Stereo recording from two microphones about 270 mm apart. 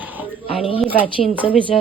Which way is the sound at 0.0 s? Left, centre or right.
Centre.